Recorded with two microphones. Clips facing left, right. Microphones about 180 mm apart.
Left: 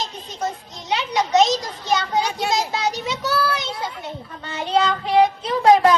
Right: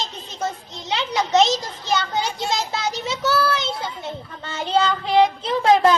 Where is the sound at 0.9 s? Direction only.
30° right (ahead or behind).